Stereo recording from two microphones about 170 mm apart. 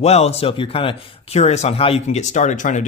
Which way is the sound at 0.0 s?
40° left (ahead or behind).